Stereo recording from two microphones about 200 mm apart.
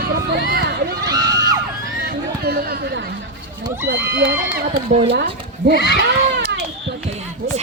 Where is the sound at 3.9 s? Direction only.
60° right (ahead or behind).